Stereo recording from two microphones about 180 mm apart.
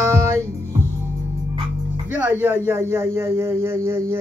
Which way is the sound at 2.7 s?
15° right (ahead or behind).